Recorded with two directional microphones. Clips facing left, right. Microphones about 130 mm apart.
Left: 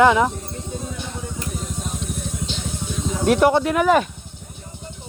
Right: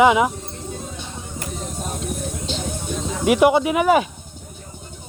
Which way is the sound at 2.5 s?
45° right (ahead or behind).